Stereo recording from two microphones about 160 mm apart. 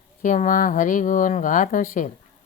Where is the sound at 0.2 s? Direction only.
55° left (ahead or behind).